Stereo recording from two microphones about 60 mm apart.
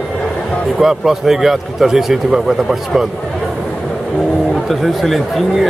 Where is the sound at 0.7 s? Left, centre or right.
Centre.